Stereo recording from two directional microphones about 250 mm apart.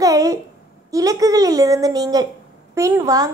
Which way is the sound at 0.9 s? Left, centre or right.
Centre.